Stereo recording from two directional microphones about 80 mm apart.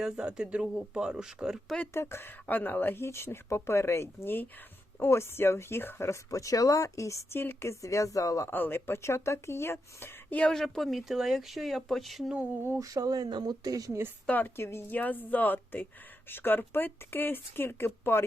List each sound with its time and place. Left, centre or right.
0.0 s speech: centre
1.9 s speech: left
8.4 s speech: left
10.5 s speech: centre
12.8 s speech: right
14.3 s speech: left